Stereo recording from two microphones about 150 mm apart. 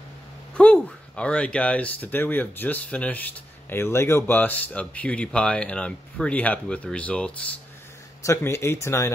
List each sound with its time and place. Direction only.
0.6 s speech: 10° left (ahead or behind)
8.2 s speech: 20° left (ahead or behind)